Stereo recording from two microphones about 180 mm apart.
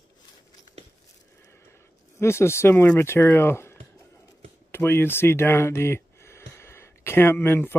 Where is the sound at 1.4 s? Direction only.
15° left (ahead or behind).